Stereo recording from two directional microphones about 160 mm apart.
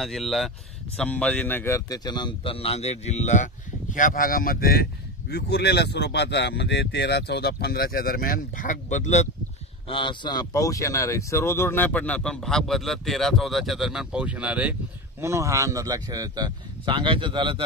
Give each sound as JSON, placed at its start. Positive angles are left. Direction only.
{"t": 0.0, "sound": "speech", "side_deg": 0}
{"t": 3.9, "sound": "speech", "side_deg": 55}
{"t": 5.3, "sound": "speech", "side_deg": 90}
{"t": 9.8, "sound": "speech", "side_deg": 30}